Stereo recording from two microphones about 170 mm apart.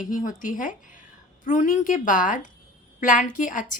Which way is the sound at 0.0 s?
50° left (ahead or behind).